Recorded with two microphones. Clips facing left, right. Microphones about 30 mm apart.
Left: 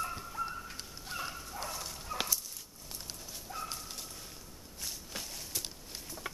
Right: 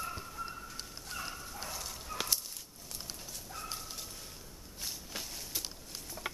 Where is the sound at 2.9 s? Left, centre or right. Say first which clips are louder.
Even; centre.